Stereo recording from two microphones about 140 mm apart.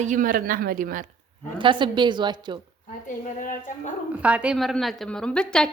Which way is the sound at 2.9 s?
70° left (ahead or behind).